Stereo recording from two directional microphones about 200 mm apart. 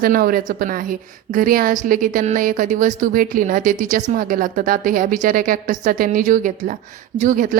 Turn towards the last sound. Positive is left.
turn(degrees=-40)  # may be behind; listen again after turning